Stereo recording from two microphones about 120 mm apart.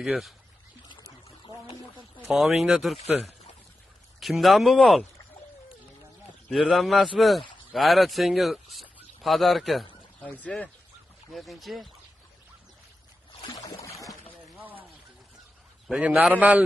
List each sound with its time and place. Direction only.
0.0 s speech: centre (ahead or behind)
0.8 s pour: 40° left (ahead or behind)
2.2 s speech: centre (ahead or behind)
4.2 s speech: centre (ahead or behind)
6.5 s speech: centre (ahead or behind)
10.2 s speech: 10° left (ahead or behind)
11.3 s speech: centre (ahead or behind)
13.5 s a sound: 30° left (ahead or behind)
14.6 s a sound: 15° right (ahead or behind)
15.9 s a man's voice: 5° right (ahead or behind)